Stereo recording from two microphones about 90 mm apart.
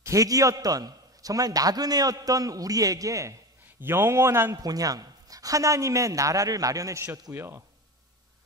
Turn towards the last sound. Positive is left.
turn(degrees=-25)  # may be behind; listen again after turning